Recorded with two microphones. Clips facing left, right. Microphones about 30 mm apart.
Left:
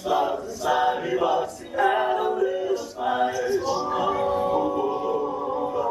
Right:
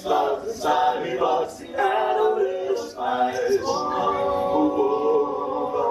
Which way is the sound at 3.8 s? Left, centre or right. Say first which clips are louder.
Right 1 dB; centre.